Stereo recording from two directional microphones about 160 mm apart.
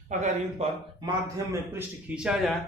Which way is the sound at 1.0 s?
20° right (ahead or behind).